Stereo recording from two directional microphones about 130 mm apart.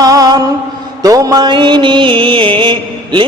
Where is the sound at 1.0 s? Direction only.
25° right (ahead or behind).